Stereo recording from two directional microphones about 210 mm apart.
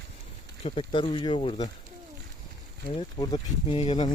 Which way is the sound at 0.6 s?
25° left (ahead or behind).